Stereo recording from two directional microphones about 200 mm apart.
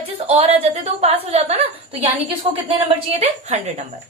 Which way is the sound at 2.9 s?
30° right (ahead or behind).